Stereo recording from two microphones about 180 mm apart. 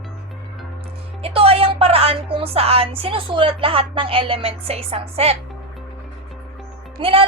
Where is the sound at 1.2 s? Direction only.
30° right (ahead or behind).